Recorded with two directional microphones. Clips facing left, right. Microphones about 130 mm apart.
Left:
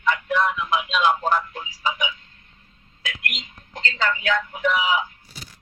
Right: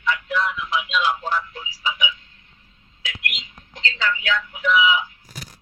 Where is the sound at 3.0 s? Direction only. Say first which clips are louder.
Left 1 dB; 45° left (ahead or behind).